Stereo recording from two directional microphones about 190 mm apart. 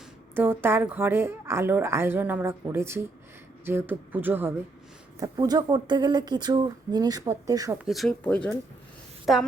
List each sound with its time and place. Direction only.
0.3 s speech: 10° right (ahead or behind)
5.2 s speech: 20° right (ahead or behind)
7.9 s speech: centre (ahead or behind)